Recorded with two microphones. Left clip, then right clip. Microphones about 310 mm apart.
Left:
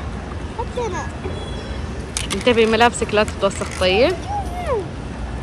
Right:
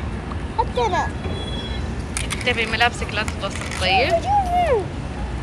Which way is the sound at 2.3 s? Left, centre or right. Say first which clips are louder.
Left 7 dB; centre.